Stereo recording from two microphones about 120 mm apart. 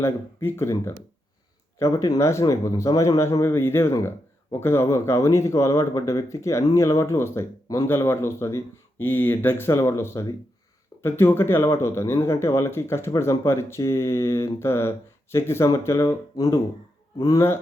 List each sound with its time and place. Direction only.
0.0 s speech: 20° left (ahead or behind)